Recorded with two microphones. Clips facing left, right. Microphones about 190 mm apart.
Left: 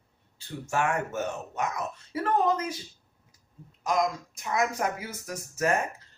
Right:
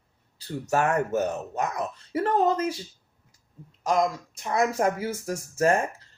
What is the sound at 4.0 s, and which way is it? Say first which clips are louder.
Speech: right 2 dB; 30° right (ahead or behind).